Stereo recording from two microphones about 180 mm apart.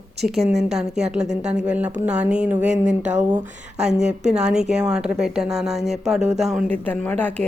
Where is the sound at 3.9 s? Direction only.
40° right (ahead or behind).